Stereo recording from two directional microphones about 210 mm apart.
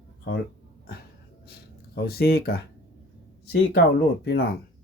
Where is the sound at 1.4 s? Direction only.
50° left (ahead or behind).